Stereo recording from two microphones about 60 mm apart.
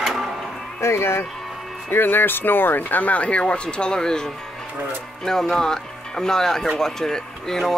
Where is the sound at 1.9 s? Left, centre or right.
Left.